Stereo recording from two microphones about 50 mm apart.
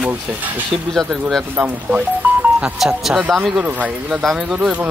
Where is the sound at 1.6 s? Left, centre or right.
Centre.